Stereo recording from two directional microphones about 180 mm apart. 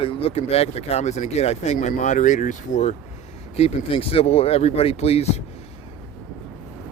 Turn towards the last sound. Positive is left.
turn(degrees=35)  # may be behind; listen again after turning